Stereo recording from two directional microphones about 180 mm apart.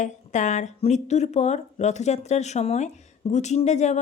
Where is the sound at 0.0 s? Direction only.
40° left (ahead or behind).